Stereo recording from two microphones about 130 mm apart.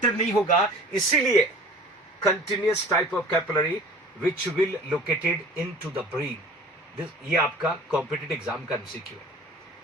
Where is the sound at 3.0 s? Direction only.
Centre (ahead or behind).